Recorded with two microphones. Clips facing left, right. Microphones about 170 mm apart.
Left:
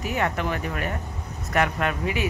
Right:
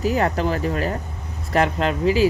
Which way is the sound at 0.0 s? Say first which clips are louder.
Right 6 dB; 35° right (ahead or behind).